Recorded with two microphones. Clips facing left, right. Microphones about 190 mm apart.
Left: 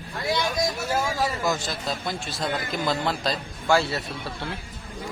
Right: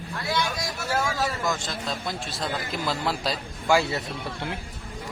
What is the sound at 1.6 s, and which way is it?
A man's voice, centre (ahead or behind).